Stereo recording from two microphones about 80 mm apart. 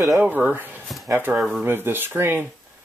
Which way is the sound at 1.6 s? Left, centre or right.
Right.